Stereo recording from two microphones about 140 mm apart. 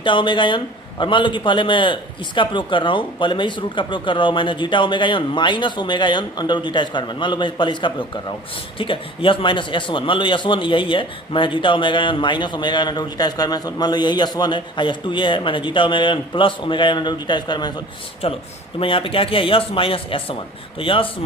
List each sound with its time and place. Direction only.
0.0 s a man's voice: 35° left (ahead or behind)
18.8 s a man's voice: 40° left (ahead or behind)